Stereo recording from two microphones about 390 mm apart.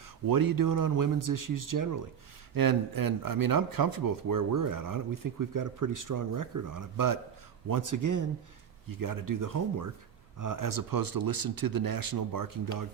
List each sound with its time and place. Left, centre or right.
0.3 s speech: right